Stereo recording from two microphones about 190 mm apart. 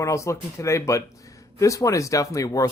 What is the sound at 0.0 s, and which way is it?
Speech, 15° left (ahead or behind).